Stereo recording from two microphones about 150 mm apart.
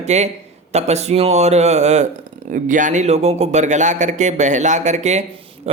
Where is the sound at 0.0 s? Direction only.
50° right (ahead or behind).